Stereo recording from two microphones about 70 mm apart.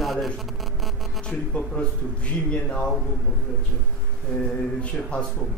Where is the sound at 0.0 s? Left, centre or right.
Centre.